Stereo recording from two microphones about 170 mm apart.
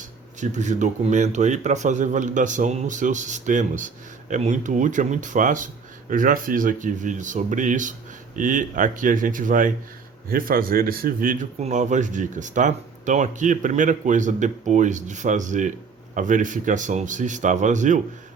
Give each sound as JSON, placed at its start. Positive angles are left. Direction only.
{"t": 0.3, "sound": "a man's voice", "side_deg": -45}